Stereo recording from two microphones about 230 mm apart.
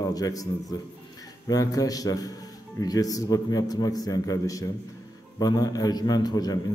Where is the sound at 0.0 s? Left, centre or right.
Centre.